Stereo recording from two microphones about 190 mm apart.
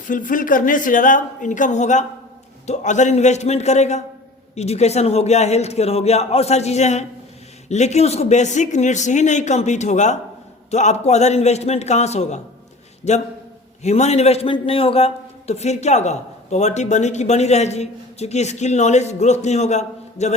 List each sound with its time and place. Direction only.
0.1 s a man's voice: 45° left (ahead or behind)
13.8 s a man's voice: 35° left (ahead or behind)